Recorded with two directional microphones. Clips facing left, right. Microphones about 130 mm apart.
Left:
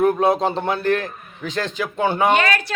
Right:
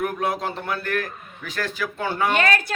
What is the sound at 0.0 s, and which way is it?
A man's voice, 25° left (ahead or behind).